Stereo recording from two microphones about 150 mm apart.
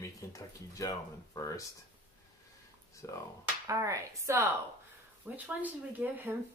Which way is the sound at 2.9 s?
20° left (ahead or behind).